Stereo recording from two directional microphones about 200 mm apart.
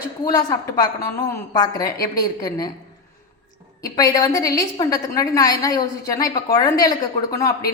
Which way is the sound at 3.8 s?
20° left (ahead or behind).